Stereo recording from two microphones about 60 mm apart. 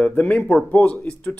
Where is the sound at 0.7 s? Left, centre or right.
Left.